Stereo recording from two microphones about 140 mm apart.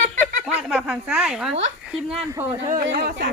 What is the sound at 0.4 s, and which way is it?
Speech, 5° right (ahead or behind).